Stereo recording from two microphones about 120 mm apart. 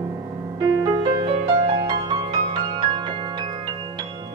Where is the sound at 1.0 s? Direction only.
45° right (ahead or behind).